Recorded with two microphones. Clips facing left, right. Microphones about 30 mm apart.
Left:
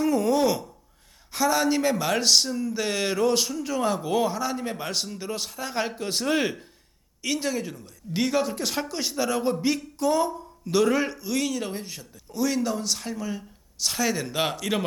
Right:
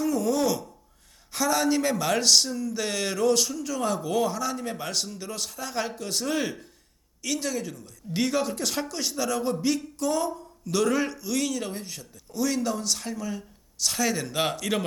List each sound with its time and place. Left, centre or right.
0.0 s speech: left
1.3 s speech: centre; by 6.6 s left
7.2 s speech: centre